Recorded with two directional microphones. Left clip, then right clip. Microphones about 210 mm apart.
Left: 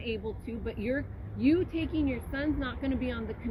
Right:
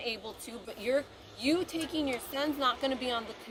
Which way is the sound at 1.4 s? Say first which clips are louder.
Left 3 dB; 25° right (ahead or behind).